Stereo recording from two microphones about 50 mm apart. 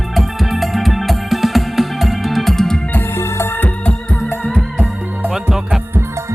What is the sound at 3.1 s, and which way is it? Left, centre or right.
Music, left.